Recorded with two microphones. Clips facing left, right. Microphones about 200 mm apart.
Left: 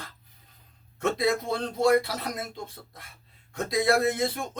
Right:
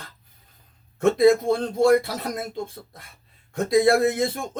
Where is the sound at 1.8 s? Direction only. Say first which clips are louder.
Right 3 dB; 50° right (ahead or behind).